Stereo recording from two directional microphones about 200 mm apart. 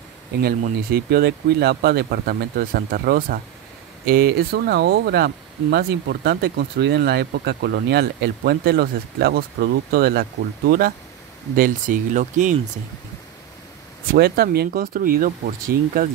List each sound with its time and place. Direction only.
0.4 s speech: 50° right (ahead or behind)
11.5 s speech: 45° right (ahead or behind)
14.1 s speech: 50° right (ahead or behind)